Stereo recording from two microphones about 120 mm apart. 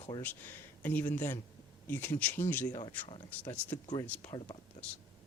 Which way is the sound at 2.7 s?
45° left (ahead or behind).